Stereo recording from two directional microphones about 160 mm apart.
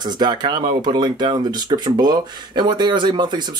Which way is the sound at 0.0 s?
25° right (ahead or behind).